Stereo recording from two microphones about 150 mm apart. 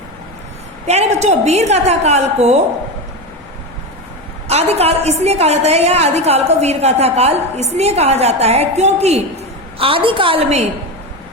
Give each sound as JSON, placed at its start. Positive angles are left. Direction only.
{"t": 0.9, "sound": "a woman's voice", "side_deg": -45}
{"t": 4.4, "sound": "a woman's voice", "side_deg": -45}